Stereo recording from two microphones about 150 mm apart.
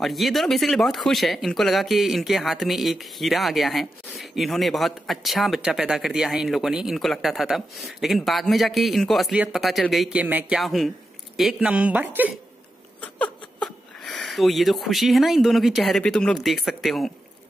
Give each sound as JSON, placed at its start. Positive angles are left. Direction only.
{"t": 0.0, "sound": "speech", "side_deg": 0}
{"t": 10.6, "sound": "a woman's voice", "side_deg": 0}
{"t": 13.0, "sound": "speech", "side_deg": 5}